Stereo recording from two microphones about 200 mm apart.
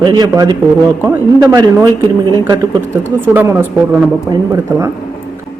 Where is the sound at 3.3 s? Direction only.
10° right (ahead or behind).